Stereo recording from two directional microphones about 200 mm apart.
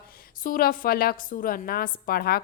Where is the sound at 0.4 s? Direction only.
45° left (ahead or behind).